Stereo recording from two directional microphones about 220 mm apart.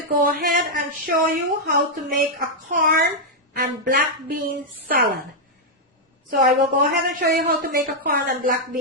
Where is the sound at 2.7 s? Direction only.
40° right (ahead or behind).